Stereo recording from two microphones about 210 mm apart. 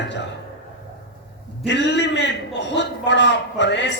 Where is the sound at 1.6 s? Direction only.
55° left (ahead or behind).